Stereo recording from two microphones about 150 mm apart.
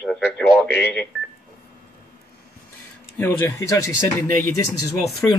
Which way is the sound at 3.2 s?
15° left (ahead or behind).